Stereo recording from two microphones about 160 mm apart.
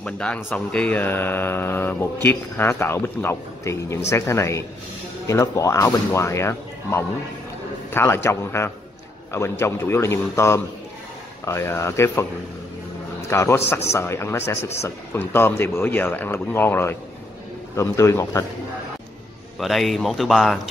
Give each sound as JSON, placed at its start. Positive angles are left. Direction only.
{"t": 0.0, "sound": "speech", "side_deg": 5}
{"t": 13.3, "sound": "speech", "side_deg": 15}
{"t": 19.6, "sound": "speech", "side_deg": 0}